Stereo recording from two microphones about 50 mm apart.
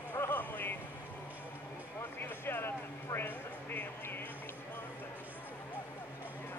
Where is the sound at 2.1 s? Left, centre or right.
Left.